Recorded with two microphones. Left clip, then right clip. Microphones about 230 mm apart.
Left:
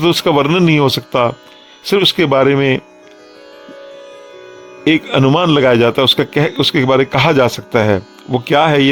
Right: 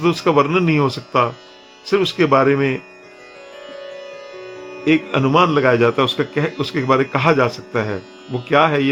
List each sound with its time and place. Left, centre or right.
0.0 s a man's voice: left
4.8 s a man's voice: left